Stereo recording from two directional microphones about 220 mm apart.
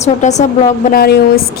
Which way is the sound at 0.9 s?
45° left (ahead or behind).